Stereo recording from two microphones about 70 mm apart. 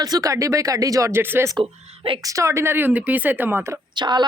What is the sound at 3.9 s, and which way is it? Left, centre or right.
Speech, right.